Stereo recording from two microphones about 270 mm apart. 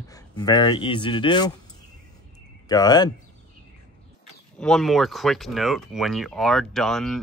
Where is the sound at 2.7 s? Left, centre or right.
Centre.